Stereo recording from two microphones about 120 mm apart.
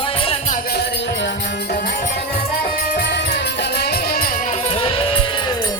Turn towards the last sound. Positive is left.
turn(degrees=50)  # may be behind; listen again after turning